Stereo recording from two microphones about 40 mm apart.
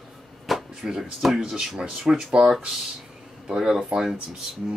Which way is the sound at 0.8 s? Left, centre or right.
Centre.